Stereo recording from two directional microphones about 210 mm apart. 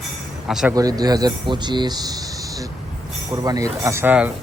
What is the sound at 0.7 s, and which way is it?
A man's voice, 15° right (ahead or behind).